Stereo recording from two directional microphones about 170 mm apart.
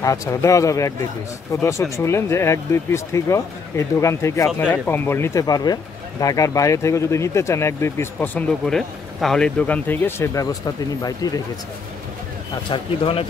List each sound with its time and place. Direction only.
0.0 s speech: 20° left (ahead or behind)
12.6 s speech: 30° left (ahead or behind)